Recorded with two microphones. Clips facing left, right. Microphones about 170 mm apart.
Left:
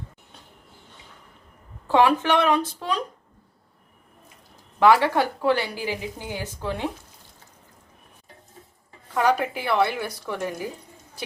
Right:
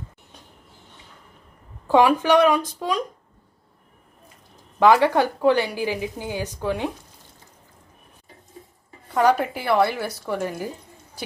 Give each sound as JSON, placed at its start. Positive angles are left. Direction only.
{"t": 1.9, "sound": "a woman's voice", "side_deg": -15}
{"t": 4.8, "sound": "a woman's voice", "side_deg": -15}
{"t": 9.2, "sound": "a woman's voice", "side_deg": -10}